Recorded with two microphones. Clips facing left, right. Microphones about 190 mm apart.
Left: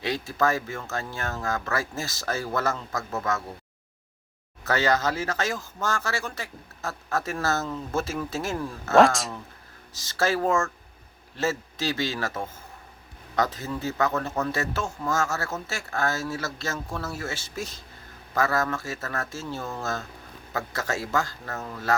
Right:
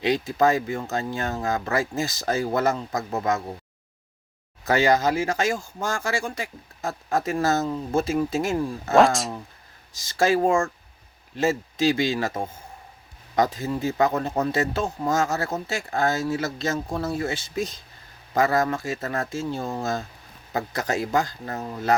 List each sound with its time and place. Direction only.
0.0 s speech: 15° right (ahead or behind)
4.6 s speech: 15° right (ahead or behind)
9.0 s speech: centre (ahead or behind)
9.9 s speech: 15° right (ahead or behind)
13.3 s speech: 15° right (ahead or behind)